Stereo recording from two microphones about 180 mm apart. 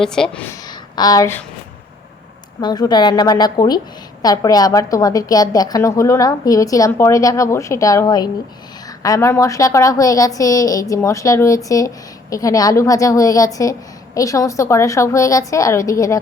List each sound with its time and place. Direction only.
0.0 s speech: 5° left (ahead or behind)
0.9 s a woman's voice: 20° left (ahead or behind)
2.6 s a woman's voice: 25° left (ahead or behind)